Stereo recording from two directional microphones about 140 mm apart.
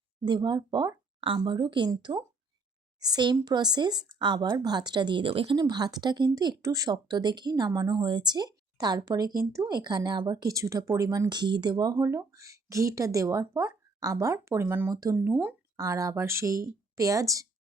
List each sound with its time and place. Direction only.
0.3 s speech: 30° right (ahead or behind); by 15.5 s 10° right (ahead or behind)
15.8 s speech: 25° right (ahead or behind)